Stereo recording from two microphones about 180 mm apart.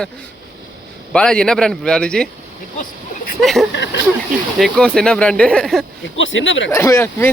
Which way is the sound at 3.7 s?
80° left.